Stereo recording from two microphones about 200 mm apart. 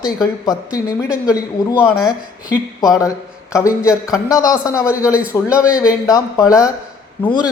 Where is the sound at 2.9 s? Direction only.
15° left (ahead or behind).